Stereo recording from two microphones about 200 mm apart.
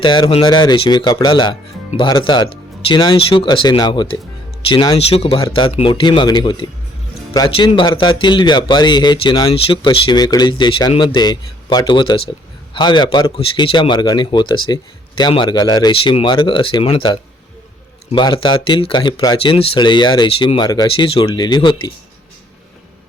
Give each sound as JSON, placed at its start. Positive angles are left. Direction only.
{"t": 0.0, "sound": "a man's voice", "side_deg": 25}